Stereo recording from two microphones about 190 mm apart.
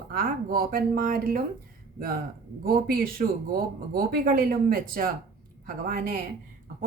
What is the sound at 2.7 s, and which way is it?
Speech, 50° right (ahead or behind).